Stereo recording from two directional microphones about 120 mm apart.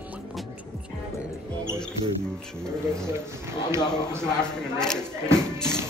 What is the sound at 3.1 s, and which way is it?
Speech, 20° right (ahead or behind).